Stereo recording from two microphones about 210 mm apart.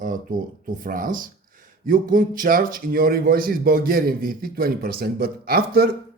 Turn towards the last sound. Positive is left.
turn(degrees=-45)  # may be behind; listen again after turning